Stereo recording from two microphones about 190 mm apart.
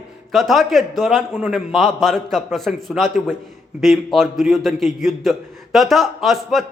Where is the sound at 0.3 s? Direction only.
Centre (ahead or behind).